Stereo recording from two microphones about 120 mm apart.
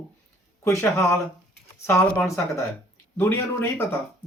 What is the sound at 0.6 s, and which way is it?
Speech, 25° left (ahead or behind).